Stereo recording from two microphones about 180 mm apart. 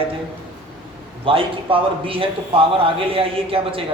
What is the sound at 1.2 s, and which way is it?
A man's voice, 30° right (ahead or behind).